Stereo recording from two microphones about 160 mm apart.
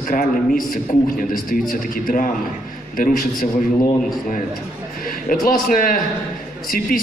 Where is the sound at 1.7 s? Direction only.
60° left (ahead or behind).